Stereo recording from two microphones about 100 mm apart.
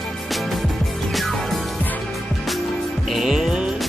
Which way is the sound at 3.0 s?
Centre (ahead or behind).